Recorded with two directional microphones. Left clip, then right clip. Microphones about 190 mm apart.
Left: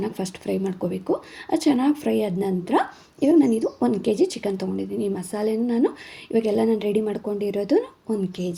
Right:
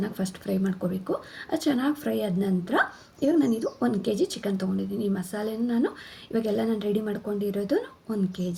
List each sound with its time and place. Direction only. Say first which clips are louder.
0.0 s speech: left 4 dB; 25° left (ahead or behind)